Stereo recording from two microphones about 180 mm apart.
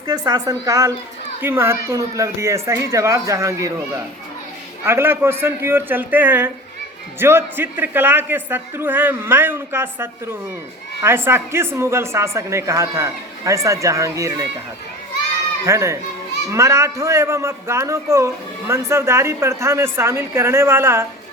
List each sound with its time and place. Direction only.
0.1 s a woman's voice: 20° right (ahead or behind)
15.6 s speech: 15° right (ahead or behind)